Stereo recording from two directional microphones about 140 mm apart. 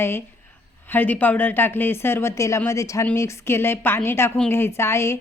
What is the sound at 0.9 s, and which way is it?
Speech, 15° left (ahead or behind).